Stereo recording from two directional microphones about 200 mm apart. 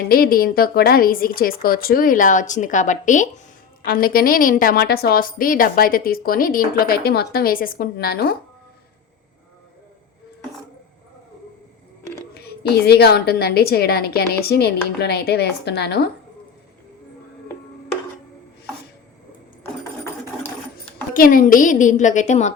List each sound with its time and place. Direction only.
0.1 s a woman's voice: 45° left (ahead or behind)
12.3 s a woman's voice: 55° left (ahead or behind)
20.7 s a woman's voice: 45° left (ahead or behind)